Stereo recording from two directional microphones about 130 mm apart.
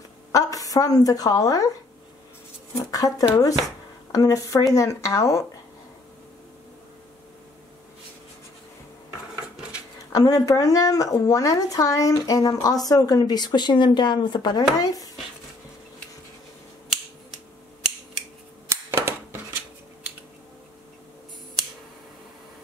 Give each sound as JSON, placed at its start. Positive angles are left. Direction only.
{"t": 0.3, "sound": "a woman's voice", "side_deg": 25}
{"t": 2.7, "sound": "speech", "side_deg": 25}
{"t": 10.1, "sound": "speech", "side_deg": 30}
{"t": 18.7, "sound": "a sound", "side_deg": -20}